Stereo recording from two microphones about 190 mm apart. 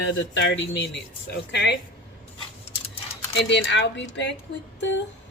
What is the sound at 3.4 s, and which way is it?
Speech, 65° left (ahead or behind).